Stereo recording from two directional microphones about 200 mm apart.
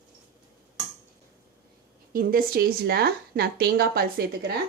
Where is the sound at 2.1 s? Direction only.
45° right (ahead or behind).